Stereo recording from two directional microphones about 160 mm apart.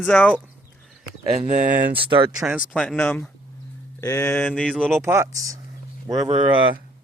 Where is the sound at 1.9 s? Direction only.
35° right (ahead or behind).